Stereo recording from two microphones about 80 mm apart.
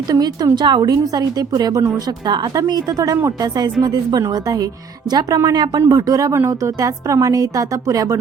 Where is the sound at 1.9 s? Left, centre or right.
Right.